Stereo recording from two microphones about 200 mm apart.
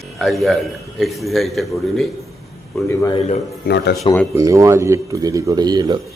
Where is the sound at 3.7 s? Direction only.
55° left (ahead or behind).